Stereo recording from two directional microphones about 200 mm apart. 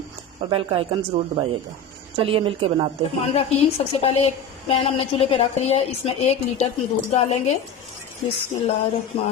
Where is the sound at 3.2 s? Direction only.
30° left (ahead or behind).